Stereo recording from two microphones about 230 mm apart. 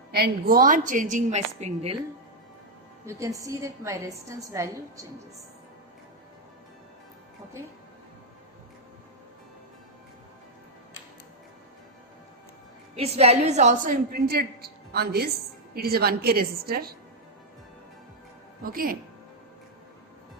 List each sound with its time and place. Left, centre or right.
0.1 s a woman's voice: right
3.1 s a woman's voice: centre
13.0 s a woman's voice: right
18.6 s a woman's voice: right